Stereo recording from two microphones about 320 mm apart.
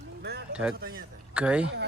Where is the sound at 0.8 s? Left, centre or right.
Right.